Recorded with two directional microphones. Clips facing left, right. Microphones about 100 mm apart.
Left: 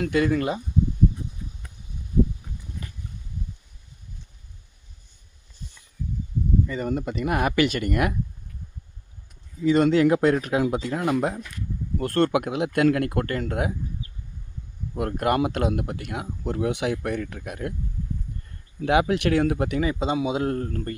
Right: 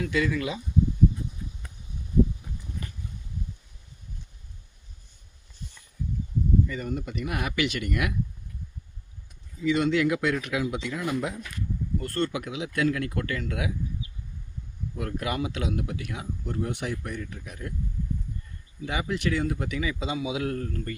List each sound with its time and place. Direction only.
0.0 s speech: 50° left (ahead or behind)
6.8 s speech: 50° left (ahead or behind)
9.6 s speech: 40° left (ahead or behind)
11.9 s speech: 60° left (ahead or behind)
18.8 s speech: 65° left (ahead or behind); by 20.9 s 40° left (ahead or behind)